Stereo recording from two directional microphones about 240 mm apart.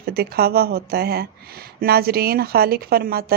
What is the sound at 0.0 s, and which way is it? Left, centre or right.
Speech, right.